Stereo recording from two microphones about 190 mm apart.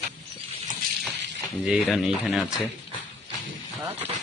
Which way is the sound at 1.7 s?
5° right (ahead or behind).